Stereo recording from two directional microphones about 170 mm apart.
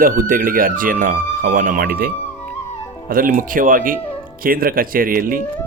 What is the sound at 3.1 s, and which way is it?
Speech, 55° right (ahead or behind).